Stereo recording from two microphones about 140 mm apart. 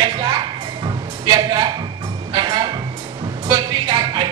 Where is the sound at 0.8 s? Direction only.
30° right (ahead or behind).